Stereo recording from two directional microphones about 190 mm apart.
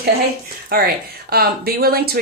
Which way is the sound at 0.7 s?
55° right (ahead or behind).